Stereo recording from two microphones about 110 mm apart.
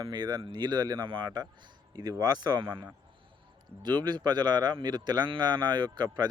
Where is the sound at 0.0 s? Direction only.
40° right (ahead or behind).